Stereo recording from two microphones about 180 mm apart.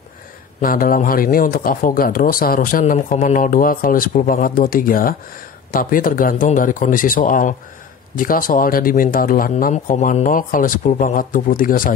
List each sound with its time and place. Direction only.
0.6 s speech: 50° left (ahead or behind)